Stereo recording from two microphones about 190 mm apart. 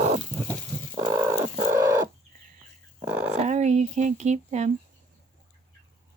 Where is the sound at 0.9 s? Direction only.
20° right (ahead or behind).